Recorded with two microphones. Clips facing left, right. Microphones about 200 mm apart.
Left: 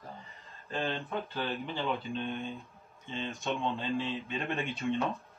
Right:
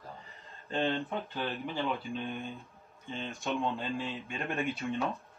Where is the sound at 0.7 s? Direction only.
20° right (ahead or behind).